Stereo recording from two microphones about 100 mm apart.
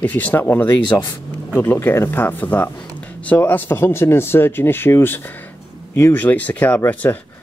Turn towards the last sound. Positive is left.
turn(degrees=15)  # may be behind; listen again after turning